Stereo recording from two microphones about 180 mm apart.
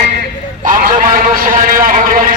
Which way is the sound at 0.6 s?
50° right (ahead or behind).